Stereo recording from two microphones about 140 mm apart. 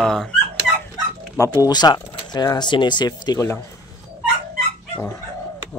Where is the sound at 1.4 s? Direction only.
25° left (ahead or behind).